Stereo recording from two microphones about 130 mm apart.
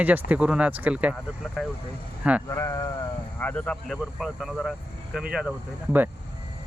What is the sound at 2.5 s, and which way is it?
Speech, 25° left (ahead or behind).